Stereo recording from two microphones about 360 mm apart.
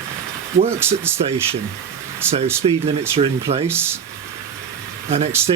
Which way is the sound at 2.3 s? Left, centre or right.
Centre.